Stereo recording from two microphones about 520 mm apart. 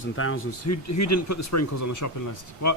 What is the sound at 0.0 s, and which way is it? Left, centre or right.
Speech, left.